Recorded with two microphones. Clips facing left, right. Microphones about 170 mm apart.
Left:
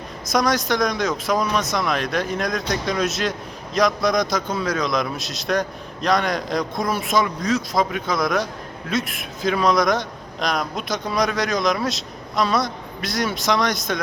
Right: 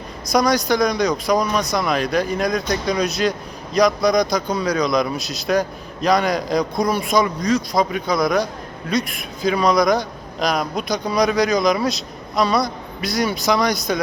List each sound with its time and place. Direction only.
0.3 s a man's voice: centre (ahead or behind)